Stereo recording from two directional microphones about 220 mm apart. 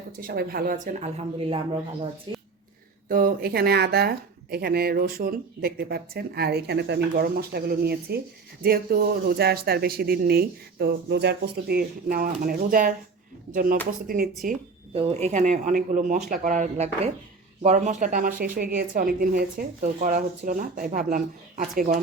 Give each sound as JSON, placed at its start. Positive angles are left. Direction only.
{"t": 0.2, "sound": "a woman's voice", "side_deg": -40}
{"t": 3.1, "sound": "a woman's voice", "side_deg": -40}